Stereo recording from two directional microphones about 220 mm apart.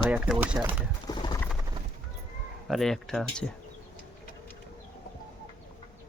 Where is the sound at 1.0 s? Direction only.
20° left (ahead or behind).